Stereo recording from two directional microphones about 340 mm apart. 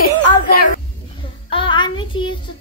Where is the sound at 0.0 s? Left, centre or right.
Left.